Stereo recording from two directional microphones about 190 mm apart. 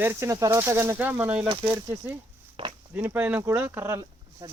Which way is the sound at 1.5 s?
25° right (ahead or behind).